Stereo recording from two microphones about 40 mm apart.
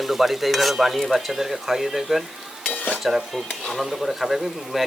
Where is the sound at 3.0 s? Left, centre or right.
Centre.